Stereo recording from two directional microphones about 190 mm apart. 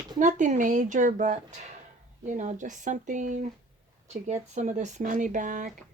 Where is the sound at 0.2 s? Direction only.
40° right (ahead or behind).